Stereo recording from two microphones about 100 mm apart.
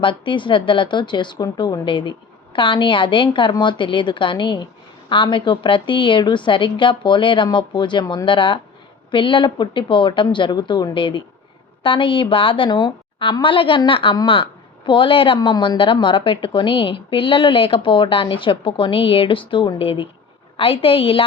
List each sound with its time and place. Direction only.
0.0 s a woman's voice: 55° left (ahead or behind)
15.4 s a woman's voice: 50° left (ahead or behind); by 21.2 s 70° left (ahead or behind)